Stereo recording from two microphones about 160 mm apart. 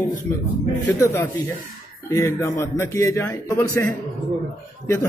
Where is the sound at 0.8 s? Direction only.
15° left (ahead or behind).